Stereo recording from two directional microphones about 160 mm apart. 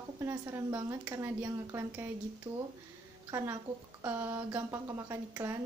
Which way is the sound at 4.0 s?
10° right (ahead or behind).